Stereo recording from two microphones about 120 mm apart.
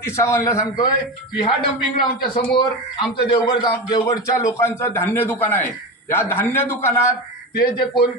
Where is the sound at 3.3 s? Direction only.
40° left (ahead or behind); by 6.9 s 15° left (ahead or behind).